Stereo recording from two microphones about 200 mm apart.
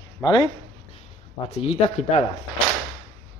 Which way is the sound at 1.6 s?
30° left (ahead or behind).